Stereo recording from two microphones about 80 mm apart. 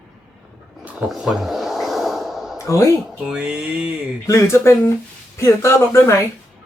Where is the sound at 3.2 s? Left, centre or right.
Centre.